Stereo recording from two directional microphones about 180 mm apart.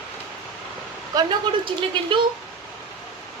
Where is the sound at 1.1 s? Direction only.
25° right (ahead or behind).